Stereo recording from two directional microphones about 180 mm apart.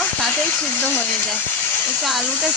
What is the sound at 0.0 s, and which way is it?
Speech, 5° left (ahead or behind).